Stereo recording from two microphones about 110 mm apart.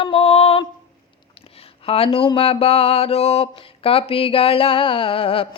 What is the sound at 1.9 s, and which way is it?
Mantra, 60° left (ahead or behind).